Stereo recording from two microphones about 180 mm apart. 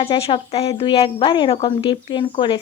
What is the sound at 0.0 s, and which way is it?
Speech, 35° left (ahead or behind).